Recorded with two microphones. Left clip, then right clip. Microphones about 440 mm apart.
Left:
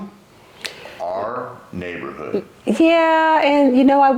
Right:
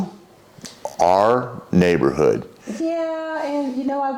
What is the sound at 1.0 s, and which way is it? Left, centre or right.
Speech, right.